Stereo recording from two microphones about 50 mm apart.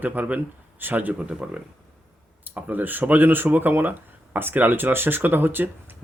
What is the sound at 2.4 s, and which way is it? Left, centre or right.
Speech, right.